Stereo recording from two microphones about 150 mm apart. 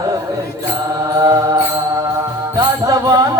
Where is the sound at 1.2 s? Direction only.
25° right (ahead or behind).